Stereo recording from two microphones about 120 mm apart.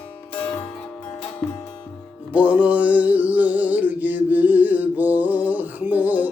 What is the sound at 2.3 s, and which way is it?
Music, 10° right (ahead or behind).